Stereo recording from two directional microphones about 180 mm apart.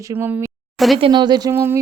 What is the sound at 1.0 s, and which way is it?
Speech, 25° right (ahead or behind).